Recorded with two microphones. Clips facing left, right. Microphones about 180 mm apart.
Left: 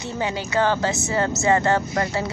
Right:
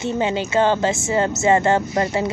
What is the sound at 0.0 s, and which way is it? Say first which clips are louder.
A woman's voice: right 5 dB; 20° right (ahead or behind).